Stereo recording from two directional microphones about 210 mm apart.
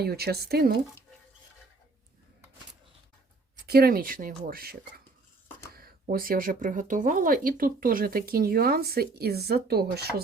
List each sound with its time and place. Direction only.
0.0 s speech: 50° right (ahead or behind)
3.7 s speech: 45° right (ahead or behind)